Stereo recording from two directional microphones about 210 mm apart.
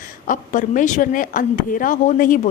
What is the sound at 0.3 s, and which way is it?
A woman's voice, 40° left (ahead or behind).